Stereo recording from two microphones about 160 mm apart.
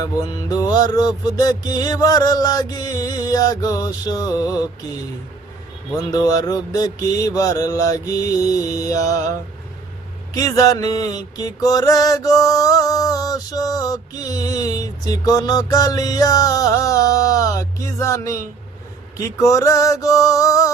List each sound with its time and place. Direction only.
0.0 s mantra: 25° left (ahead or behind)
6.0 s mantra: 25° left (ahead or behind)
10.3 s mantra: 25° left (ahead or behind)